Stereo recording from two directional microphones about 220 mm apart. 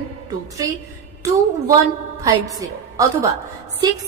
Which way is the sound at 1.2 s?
15° right (ahead or behind).